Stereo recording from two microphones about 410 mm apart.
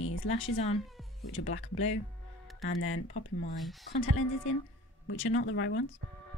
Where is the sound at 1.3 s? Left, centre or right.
Left.